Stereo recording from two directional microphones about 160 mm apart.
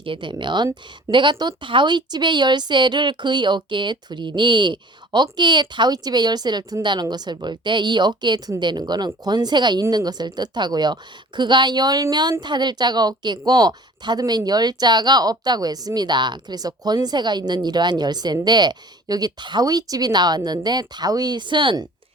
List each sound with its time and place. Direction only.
0.0 s a woman's voice: 30° right (ahead or behind)